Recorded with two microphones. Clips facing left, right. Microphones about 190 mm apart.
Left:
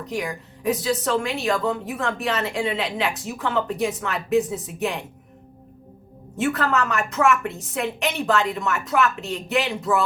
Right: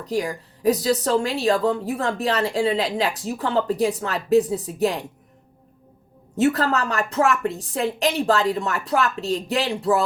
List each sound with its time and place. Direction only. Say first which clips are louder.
0.0 s a woman's voice: right 3 dB; 35° right (ahead or behind)
6.3 s a woman's voice: right 3 dB; 35° right (ahead or behind)